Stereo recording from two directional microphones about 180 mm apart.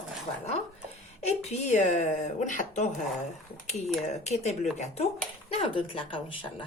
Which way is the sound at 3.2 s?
40° left (ahead or behind).